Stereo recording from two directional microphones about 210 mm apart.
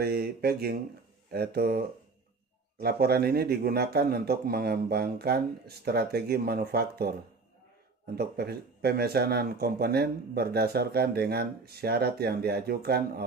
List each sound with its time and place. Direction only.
0.0 s speech: 50° right (ahead or behind)
8.2 s speech: 50° right (ahead or behind)